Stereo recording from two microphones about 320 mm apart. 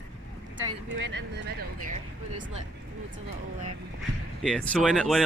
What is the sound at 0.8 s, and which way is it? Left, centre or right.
Speech, right.